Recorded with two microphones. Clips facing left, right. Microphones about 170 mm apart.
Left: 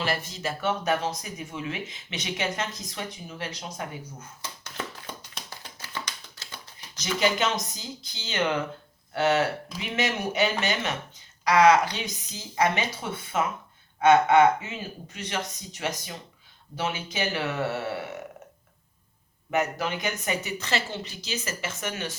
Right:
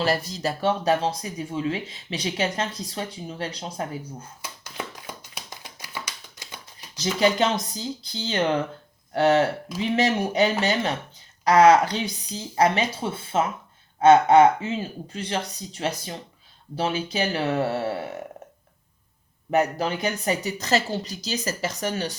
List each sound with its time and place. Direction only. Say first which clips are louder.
0.0 s speech: right 5 dB; 35° right (ahead or behind)
4.4 s tap: even; 10° right (ahead or behind)
6.9 s speech: right 4 dB; 30° right (ahead or behind)
19.5 s speech: right 4 dB; 35° right (ahead or behind)